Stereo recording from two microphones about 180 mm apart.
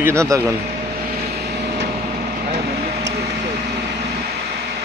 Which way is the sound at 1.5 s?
65° right (ahead or behind).